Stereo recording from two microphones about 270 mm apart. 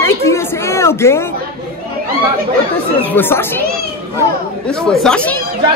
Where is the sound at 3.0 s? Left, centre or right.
Centre.